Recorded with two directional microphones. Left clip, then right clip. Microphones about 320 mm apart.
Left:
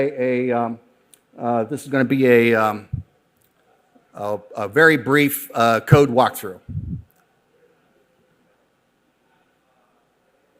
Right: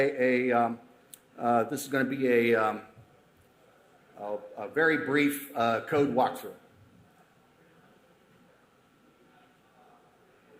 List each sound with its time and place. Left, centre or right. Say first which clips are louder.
0.0 s speech: left 5 dB; left
4.2 s a man's voice: left 11 dB; left